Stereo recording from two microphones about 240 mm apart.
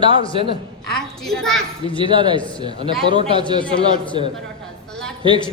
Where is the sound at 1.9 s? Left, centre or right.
Centre.